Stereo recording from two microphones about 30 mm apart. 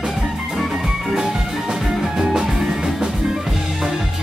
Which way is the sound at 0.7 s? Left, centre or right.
Centre.